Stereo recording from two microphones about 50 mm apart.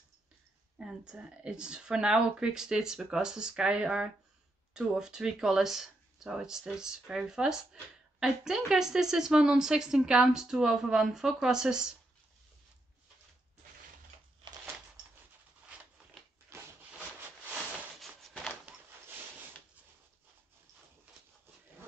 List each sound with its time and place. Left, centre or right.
0.7 s speech: centre
16.4 s rub: right